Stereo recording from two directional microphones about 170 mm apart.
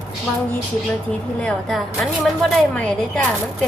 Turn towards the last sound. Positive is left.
turn(degrees=5)  # may be behind; listen again after turning